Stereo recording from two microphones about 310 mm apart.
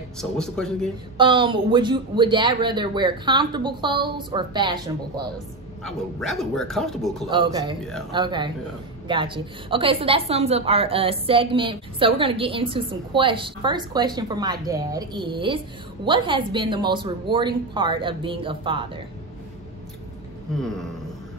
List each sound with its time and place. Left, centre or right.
0.2 s speech: centre
1.1 s a woman's voice: centre
5.9 s speech: centre
7.2 s a woman's voice: centre
20.6 s speech: centre